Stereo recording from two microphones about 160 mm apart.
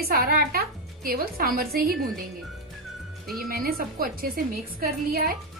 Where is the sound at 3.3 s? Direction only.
70° right (ahead or behind).